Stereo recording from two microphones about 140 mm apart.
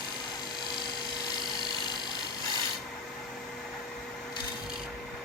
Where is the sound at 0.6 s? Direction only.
30° left (ahead or behind).